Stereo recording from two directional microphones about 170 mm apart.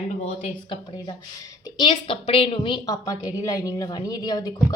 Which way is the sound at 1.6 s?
25° left (ahead or behind).